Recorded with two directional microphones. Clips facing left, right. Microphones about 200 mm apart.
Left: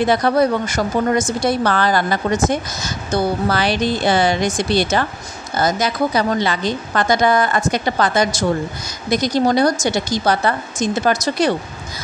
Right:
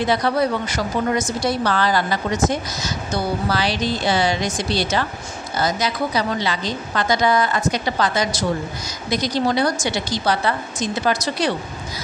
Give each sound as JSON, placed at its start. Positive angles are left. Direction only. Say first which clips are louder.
{"t": 0.0, "sound": "a woman's voice", "louder": "left 4 dB", "side_deg": 50}